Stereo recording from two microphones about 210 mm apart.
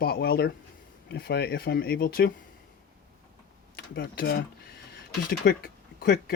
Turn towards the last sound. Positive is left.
turn(degrees=50)  # may be behind; listen again after turning